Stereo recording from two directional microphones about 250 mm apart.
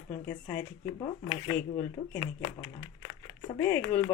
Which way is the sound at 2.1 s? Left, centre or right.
Centre.